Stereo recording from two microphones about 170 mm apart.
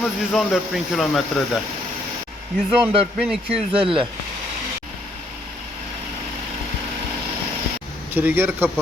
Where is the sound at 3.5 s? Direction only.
30° right (ahead or behind).